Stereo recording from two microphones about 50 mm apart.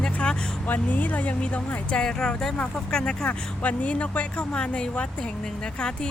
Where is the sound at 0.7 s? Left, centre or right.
Left.